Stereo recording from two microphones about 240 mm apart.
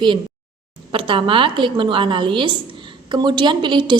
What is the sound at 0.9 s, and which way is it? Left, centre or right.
A woman's voice, right.